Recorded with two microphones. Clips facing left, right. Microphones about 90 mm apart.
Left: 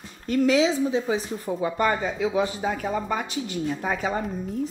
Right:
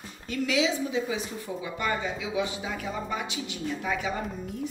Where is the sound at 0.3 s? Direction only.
40° left (ahead or behind).